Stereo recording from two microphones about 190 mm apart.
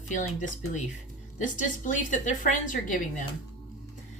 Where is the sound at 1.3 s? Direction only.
40° left (ahead or behind).